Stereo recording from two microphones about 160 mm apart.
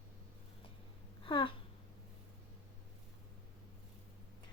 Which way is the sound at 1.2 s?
30° left (ahead or behind).